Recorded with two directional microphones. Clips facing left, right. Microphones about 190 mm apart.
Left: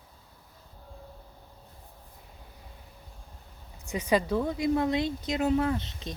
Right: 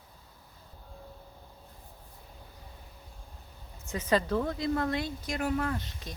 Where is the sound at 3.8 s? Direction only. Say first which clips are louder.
Left 2 dB; 15° left (ahead or behind).